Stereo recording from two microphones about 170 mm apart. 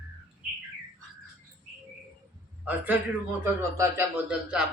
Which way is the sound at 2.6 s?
10° right (ahead or behind).